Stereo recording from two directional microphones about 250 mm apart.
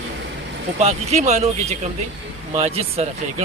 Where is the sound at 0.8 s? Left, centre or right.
Right.